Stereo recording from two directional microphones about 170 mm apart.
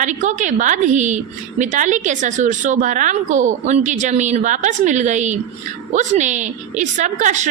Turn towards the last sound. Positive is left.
turn(degrees=-45)  # may be behind; listen again after turning